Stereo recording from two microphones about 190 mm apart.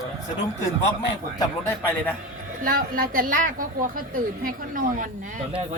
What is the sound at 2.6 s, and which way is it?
Speech, 50° right (ahead or behind).